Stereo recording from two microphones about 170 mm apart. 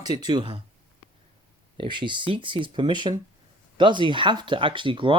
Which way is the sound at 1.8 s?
30° right (ahead or behind).